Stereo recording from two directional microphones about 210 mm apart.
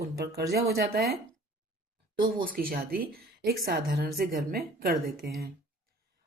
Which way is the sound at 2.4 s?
45° right (ahead or behind).